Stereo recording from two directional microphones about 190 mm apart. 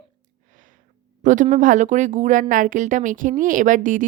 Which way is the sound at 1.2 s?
40° right (ahead or behind).